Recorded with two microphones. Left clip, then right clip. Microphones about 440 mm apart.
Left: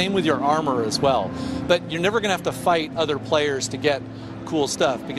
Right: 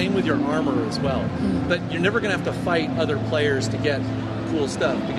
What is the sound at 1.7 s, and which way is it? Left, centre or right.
Speech, left.